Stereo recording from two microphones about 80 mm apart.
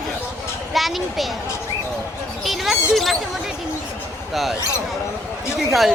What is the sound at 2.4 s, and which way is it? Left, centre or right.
Speech, centre.